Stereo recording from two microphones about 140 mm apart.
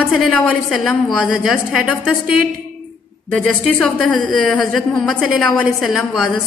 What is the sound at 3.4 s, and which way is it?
A woman's voice, 10° left (ahead or behind).